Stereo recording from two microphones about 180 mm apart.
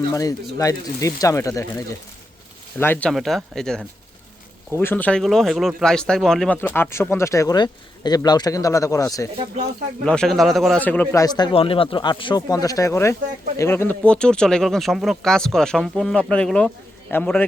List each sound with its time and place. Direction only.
0.1 s speech: 20° left (ahead or behind)
2.7 s speech: 10° left (ahead or behind)
10.1 s speech: 5° left (ahead or behind)